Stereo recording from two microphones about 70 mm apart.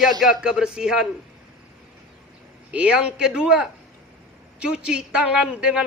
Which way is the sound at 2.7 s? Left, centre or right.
Centre.